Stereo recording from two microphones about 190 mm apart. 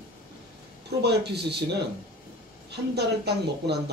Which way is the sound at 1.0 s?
60° right (ahead or behind).